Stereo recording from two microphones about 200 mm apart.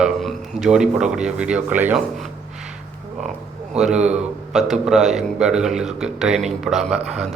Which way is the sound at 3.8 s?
5° right (ahead or behind).